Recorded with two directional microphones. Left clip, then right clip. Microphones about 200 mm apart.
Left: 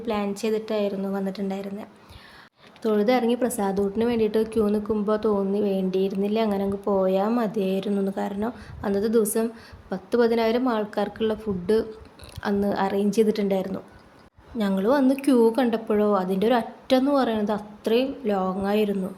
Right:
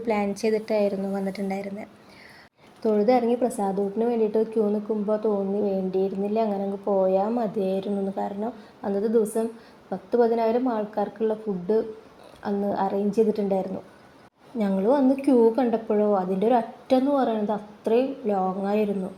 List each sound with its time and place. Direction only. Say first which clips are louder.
0.0 s a woman's voice: right 2 dB; 5° right (ahead or behind)
2.8 s a woman's voice: right 1 dB; 10° left (ahead or behind)
6.8 s speech: right 1 dB; 30° left (ahead or behind)
7.1 s a woman's voice: even; 15° left (ahead or behind)
14.7 s a woman's voice: even; 10° left (ahead or behind)